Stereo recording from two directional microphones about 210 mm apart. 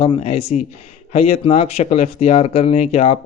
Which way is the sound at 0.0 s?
30° left (ahead or behind).